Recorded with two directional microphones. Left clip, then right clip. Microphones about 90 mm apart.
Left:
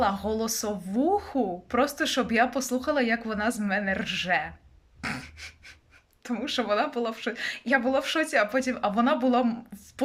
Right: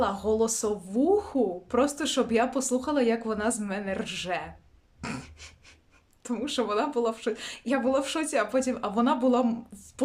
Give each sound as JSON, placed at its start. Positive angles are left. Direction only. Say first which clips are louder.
{"t": 0.0, "sound": "a woman's voice", "louder": "right 1 dB", "side_deg": -35}
{"t": 4.9, "sound": "a sound", "louder": "left 4 dB", "side_deg": -40}
{"t": 6.2, "sound": "a woman's voice", "louder": "left 1 dB", "side_deg": -40}